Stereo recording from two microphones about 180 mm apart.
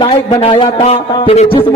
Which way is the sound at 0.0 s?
30° left (ahead or behind).